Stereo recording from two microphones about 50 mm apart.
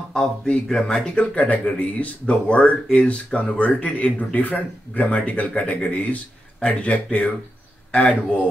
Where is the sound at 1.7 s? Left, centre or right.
Left.